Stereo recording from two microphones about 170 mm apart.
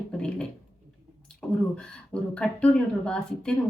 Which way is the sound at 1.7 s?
5° left (ahead or behind).